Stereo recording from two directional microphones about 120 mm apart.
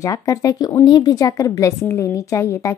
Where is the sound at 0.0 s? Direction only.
30° left (ahead or behind).